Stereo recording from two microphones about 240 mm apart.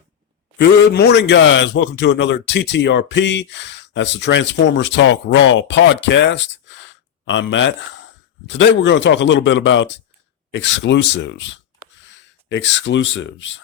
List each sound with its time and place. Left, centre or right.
0.6 s speech: left